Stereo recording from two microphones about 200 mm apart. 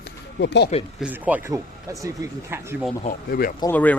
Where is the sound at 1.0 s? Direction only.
5° right (ahead or behind).